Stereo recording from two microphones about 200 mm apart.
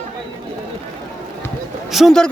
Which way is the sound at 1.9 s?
Centre (ahead or behind).